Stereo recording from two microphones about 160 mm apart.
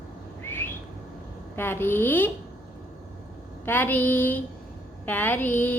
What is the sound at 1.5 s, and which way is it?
Speech, 15° left (ahead or behind).